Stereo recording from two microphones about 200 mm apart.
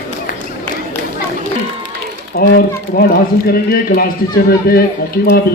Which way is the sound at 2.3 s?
45° left (ahead or behind).